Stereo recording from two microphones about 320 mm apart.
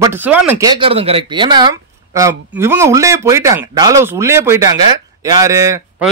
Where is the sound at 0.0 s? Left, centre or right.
Centre.